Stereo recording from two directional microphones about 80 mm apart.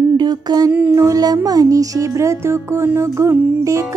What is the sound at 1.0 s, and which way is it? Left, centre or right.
Music, right.